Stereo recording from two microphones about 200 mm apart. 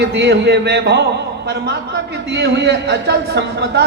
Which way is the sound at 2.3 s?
60° right (ahead or behind).